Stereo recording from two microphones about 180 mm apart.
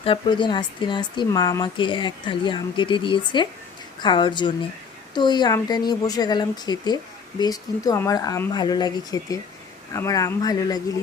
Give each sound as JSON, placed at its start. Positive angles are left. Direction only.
{"t": 0.0, "sound": "speech", "side_deg": 30}